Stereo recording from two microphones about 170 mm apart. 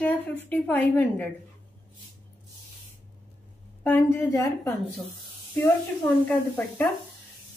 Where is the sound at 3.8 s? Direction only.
10° left (ahead or behind).